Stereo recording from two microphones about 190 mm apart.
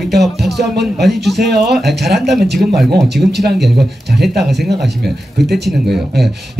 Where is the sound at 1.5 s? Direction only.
60° right (ahead or behind).